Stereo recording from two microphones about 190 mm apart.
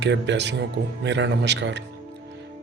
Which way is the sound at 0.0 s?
65° right (ahead or behind).